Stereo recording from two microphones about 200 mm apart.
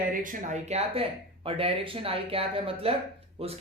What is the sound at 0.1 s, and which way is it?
Speech, 40° right (ahead or behind).